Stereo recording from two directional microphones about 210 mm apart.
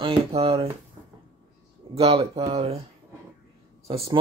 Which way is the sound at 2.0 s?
30° right (ahead or behind).